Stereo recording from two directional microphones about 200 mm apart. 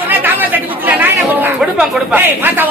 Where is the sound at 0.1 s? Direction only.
10° right (ahead or behind).